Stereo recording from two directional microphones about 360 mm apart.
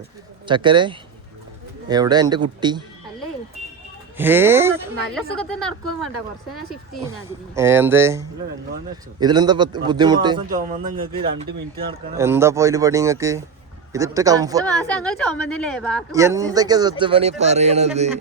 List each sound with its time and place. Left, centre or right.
0.4 s speech: centre
4.2 s speech: centre
7.5 s speech: centre
10.5 s a man's voice: right
10.8 s speech: right
11.9 s speech: centre
14.6 s speech: centre
16.1 s speech: centre